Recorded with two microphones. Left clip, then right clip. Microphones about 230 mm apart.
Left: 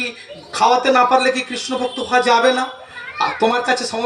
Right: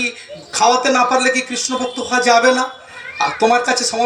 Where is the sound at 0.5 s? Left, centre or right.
Right.